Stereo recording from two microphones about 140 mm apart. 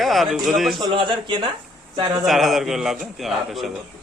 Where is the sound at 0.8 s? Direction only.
30° right (ahead or behind).